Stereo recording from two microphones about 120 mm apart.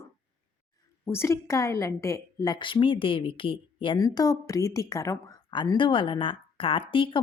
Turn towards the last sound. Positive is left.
turn(degrees=45)  # may be behind; listen again after turning